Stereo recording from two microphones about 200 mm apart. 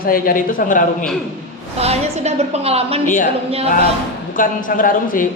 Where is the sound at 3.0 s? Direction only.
40° left (ahead or behind).